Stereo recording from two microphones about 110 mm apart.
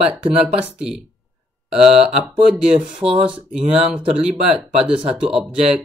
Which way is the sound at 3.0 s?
60° right (ahead or behind).